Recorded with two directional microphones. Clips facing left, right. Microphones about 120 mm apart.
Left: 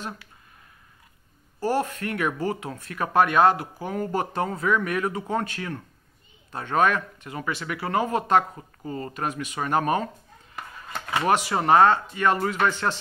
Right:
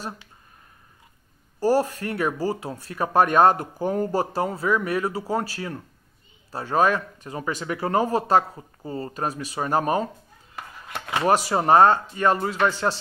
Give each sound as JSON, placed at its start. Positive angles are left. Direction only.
{"t": 1.6, "sound": "speech", "side_deg": -40}
{"t": 11.1, "sound": "speech", "side_deg": -35}